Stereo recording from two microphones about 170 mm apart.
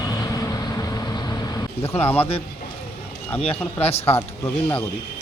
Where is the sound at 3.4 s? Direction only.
35° left (ahead or behind).